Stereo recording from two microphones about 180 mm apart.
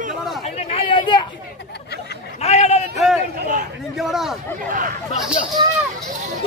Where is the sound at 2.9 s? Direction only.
Centre (ahead or behind).